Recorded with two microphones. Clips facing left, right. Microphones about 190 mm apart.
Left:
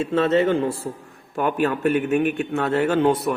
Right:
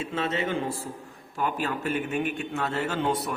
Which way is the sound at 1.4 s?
60° left (ahead or behind).